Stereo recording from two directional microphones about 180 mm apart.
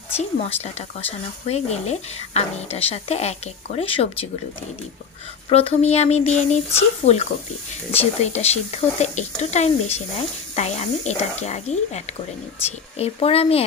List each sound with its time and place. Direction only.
0.1 s speech: 35° left (ahead or behind)
5.5 s speech: 35° left (ahead or behind)